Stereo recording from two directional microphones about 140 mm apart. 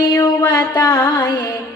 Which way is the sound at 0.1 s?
25° left (ahead or behind).